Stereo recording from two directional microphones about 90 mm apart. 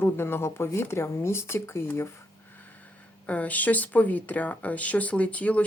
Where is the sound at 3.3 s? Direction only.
15° left (ahead or behind).